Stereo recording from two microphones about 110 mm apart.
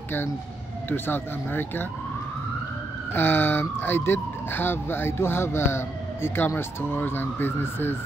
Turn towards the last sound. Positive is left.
turn(degrees=20)  # may be behind; listen again after turning